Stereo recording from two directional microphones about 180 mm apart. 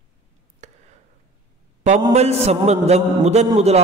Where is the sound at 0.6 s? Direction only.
40° right (ahead or behind).